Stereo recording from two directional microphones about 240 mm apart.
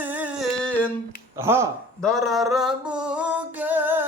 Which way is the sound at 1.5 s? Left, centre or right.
Centre.